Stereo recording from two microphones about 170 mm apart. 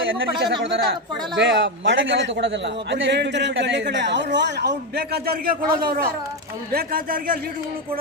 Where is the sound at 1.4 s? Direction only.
90° right.